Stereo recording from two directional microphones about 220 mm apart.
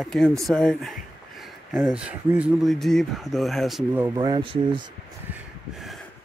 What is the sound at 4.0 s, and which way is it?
Speech, 20° right (ahead or behind).